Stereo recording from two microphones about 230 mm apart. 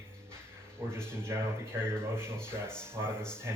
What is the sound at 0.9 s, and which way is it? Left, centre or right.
Speech, centre.